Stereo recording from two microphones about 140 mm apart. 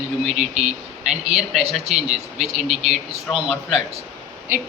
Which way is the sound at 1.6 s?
50° right (ahead or behind).